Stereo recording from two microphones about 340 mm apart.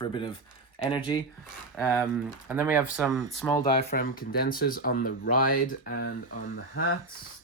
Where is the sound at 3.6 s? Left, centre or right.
Left.